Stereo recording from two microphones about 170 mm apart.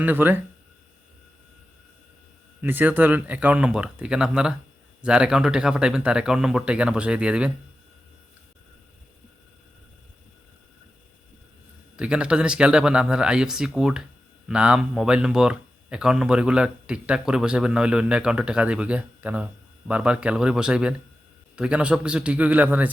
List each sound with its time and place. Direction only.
0.0 s speech: 10° right (ahead or behind)
2.6 s speech: 10° right (ahead or behind)
11.9 s speech: 5° right (ahead or behind)